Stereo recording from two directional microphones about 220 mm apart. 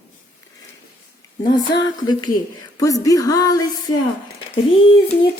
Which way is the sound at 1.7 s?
20° left (ahead or behind).